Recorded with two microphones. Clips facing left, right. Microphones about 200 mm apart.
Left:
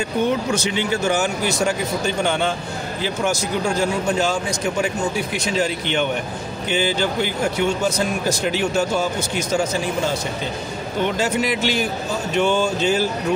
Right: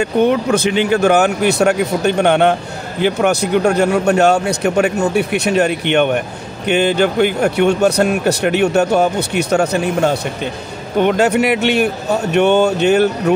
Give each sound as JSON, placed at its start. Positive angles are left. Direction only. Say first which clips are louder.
{"t": 0.0, "sound": "speech", "louder": "right 7 dB", "side_deg": -60}